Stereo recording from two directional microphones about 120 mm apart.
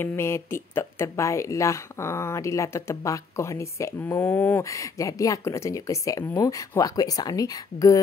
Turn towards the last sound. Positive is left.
turn(degrees=30)  # may be behind; listen again after turning